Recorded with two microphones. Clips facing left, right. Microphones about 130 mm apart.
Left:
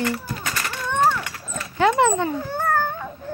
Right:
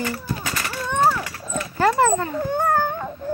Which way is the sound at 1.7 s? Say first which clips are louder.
Even; centre (ahead or behind).